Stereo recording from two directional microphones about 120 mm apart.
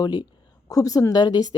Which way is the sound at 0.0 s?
35° left (ahead or behind).